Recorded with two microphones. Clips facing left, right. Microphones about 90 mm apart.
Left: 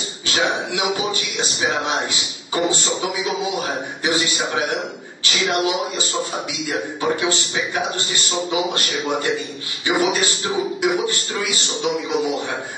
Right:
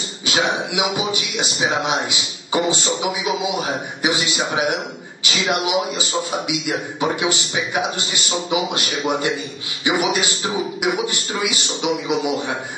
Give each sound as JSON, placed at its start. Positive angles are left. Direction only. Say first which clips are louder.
{"t": 0.3, "sound": "speech", "louder": "right 1 dB", "side_deg": -15}
{"t": 4.0, "sound": "speech", "louder": "even", "side_deg": -15}